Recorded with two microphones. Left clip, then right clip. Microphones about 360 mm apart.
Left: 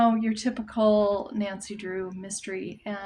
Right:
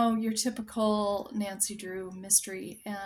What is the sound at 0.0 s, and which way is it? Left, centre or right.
Speech, right.